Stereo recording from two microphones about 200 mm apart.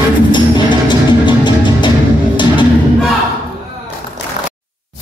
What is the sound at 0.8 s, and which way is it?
Music, 25° left (ahead or behind).